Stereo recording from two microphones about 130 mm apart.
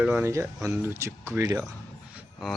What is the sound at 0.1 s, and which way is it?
Speech, 20° right (ahead or behind).